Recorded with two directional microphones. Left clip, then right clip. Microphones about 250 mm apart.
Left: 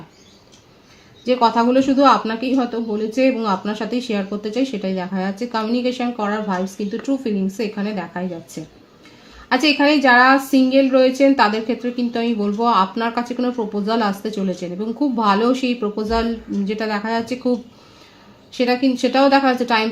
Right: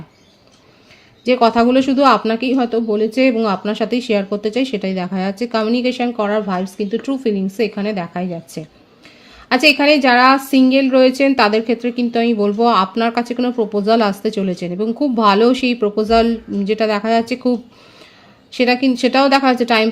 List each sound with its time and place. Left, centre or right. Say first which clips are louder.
1.2 s a woman's voice: right 3 dB; right